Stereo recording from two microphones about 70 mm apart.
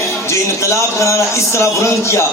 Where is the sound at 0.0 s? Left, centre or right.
Left.